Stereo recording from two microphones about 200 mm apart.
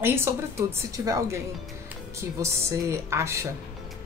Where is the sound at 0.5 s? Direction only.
15° right (ahead or behind).